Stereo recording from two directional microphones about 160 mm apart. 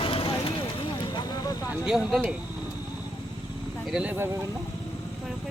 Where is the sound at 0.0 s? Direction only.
35° left (ahead or behind).